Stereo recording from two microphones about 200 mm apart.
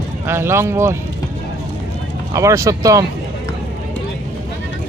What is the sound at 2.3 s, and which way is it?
Speech, 15° right (ahead or behind).